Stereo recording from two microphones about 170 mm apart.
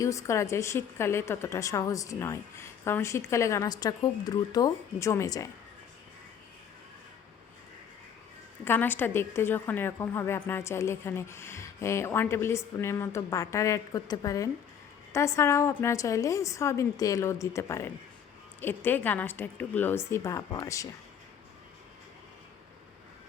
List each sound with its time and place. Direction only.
0.0 s a woman's voice: 20° left (ahead or behind)
8.6 s a woman's voice: 10° left (ahead or behind)